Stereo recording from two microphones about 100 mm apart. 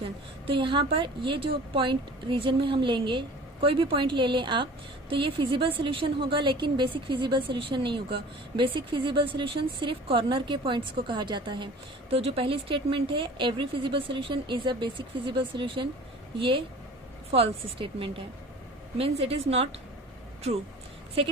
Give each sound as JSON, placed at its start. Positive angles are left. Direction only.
{"t": 0.0, "sound": "a woman's voice", "side_deg": -65}
{"t": 12.1, "sound": "a woman's voice", "side_deg": -75}
{"t": 21.2, "sound": "speech", "side_deg": -65}